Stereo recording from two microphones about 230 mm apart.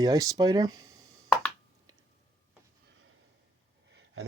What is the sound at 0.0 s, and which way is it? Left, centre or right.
Speech, centre.